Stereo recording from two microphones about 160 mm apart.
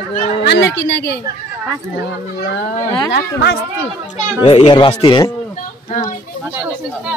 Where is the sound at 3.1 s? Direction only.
85° left.